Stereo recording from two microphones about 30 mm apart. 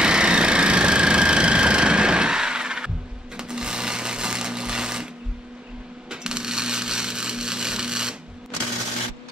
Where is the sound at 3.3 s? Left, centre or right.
Right.